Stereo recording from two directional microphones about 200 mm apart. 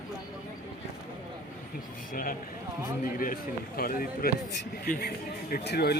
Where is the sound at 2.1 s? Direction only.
45° left (ahead or behind).